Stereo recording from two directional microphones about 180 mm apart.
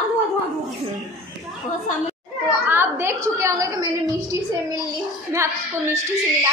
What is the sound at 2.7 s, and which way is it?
A woman's voice, 15° right (ahead or behind).